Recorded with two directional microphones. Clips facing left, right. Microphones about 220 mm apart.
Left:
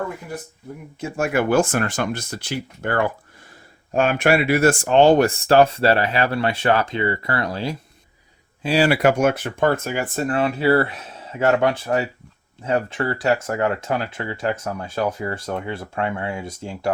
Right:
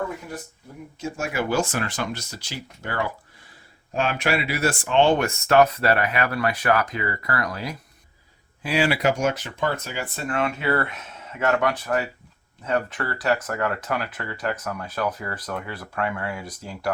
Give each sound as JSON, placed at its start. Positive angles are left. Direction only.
{"t": 0.9, "sound": "speech", "side_deg": 60}
{"t": 8.9, "sound": "speech", "side_deg": 55}